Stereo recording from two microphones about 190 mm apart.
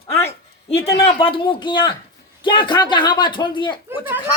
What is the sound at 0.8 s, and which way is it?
A woman's voice, 30° left (ahead or behind).